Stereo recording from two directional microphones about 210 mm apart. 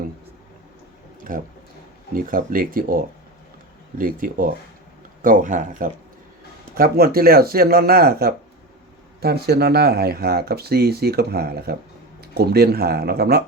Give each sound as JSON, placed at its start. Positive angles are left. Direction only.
{"t": 1.3, "sound": "speech", "side_deg": -40}